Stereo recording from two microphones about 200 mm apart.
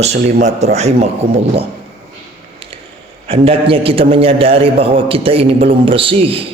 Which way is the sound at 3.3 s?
30° right (ahead or behind).